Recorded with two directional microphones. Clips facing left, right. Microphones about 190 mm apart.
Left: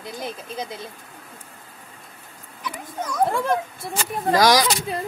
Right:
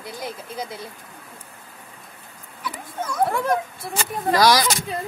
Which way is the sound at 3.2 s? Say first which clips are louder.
Even; 25° left (ahead or behind).